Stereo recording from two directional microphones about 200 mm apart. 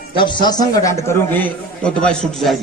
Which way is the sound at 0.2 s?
25° left (ahead or behind).